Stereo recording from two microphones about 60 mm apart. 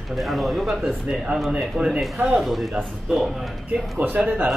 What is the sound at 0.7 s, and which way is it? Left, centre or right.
Speech, centre.